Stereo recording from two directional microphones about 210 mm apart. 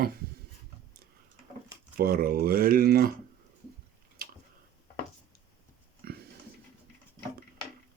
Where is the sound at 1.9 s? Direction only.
45° right (ahead or behind).